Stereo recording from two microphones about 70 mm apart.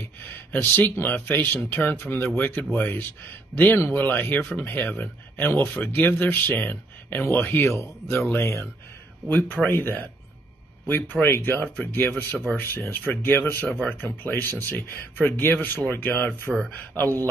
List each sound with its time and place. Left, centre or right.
0.0 s speech: left
11.1 s speech: left